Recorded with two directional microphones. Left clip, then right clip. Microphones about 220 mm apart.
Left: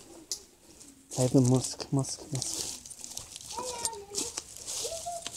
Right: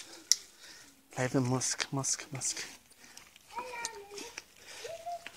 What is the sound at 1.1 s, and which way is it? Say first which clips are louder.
Speech: left 6 dB; 30° right (ahead or behind).